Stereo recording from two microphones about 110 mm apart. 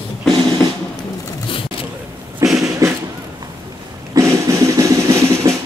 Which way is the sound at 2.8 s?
30° right (ahead or behind).